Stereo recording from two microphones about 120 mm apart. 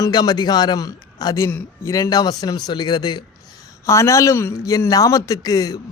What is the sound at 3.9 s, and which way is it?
Speech, 25° left (ahead or behind).